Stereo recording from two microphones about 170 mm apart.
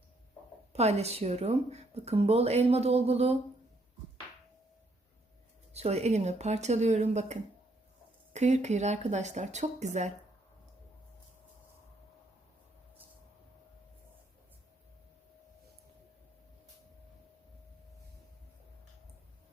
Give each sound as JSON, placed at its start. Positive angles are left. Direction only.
{"t": 0.7, "sound": "speech", "side_deg": -40}
{"t": 5.7, "sound": "speech", "side_deg": -40}